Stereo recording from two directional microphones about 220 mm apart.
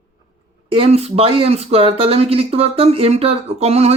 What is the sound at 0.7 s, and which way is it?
A man's voice, 25° right (ahead or behind).